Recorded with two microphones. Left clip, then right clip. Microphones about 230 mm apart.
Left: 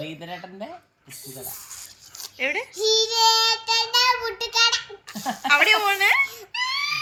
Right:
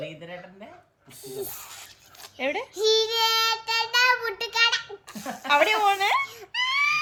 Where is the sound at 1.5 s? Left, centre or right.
Right.